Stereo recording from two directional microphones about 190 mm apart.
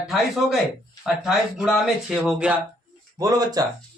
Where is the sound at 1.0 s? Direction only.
5° right (ahead or behind).